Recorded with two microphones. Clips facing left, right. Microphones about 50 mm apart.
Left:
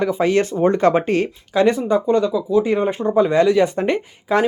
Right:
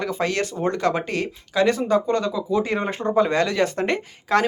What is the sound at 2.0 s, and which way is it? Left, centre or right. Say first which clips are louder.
Speech: left 5 dB; centre.